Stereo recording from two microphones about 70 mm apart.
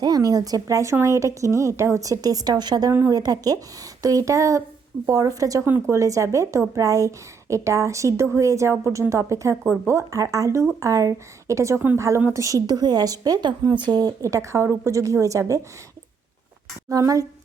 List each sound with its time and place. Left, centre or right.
0.0 s a woman's voice: right
3.1 s a woman's voice: right
14.2 s a woman's voice: right
16.9 s speech: right